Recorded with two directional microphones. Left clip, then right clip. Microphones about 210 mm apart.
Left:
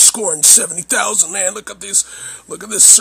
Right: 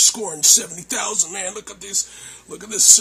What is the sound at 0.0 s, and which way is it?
Speech, 35° left (ahead or behind).